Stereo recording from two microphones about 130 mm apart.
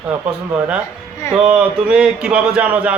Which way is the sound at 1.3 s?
10° right (ahead or behind).